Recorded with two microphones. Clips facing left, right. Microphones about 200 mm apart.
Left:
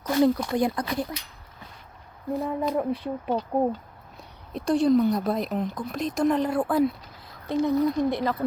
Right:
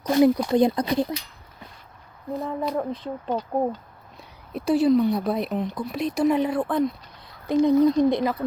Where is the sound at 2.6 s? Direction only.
10° left (ahead or behind).